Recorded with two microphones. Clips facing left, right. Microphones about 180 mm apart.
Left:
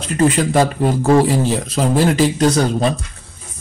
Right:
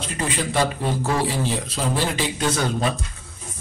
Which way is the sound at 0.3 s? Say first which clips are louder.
Left 7 dB; 45° left (ahead or behind).